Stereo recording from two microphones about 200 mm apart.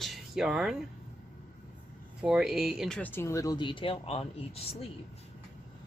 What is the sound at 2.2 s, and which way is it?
Speech, 5° right (ahead or behind).